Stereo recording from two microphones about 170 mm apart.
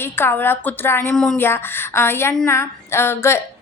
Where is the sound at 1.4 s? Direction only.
15° left (ahead or behind).